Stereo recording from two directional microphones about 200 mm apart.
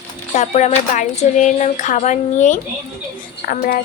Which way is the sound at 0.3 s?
35° left (ahead or behind).